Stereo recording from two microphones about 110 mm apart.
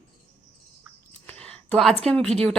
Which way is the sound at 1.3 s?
10° left (ahead or behind).